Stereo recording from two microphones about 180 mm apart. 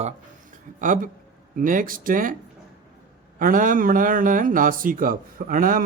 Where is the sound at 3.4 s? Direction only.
50° right (ahead or behind).